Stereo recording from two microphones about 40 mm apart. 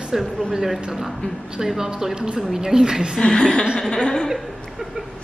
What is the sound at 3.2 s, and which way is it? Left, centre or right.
Chuckle, left.